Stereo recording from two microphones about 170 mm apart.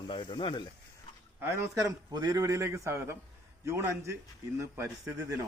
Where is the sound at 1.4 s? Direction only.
15° right (ahead or behind).